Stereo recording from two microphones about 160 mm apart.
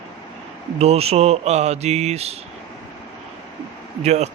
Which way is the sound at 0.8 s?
40° right (ahead or behind).